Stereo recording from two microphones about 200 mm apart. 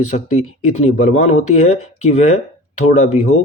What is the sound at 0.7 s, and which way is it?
Speech, 35° left (ahead or behind).